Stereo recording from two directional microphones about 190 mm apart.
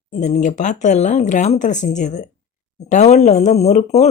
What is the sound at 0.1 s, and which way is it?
Speech, 40° left (ahead or behind).